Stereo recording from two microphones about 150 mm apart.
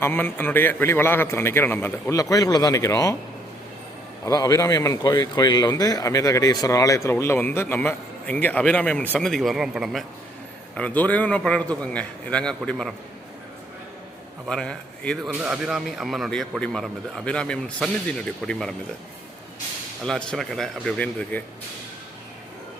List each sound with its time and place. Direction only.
0.0 s a man's voice: 15° left (ahead or behind)
4.3 s speech: 25° left (ahead or behind); by 10.0 s centre (ahead or behind)
10.8 s a man's voice: 10° left (ahead or behind)
14.4 s speech: 5° left (ahead or behind)
15.3 s speech: 10° right (ahead or behind)
20.1 s speech: 5° left (ahead or behind)